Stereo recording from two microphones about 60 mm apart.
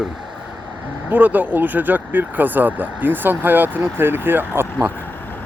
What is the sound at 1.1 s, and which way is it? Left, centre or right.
Speech, right.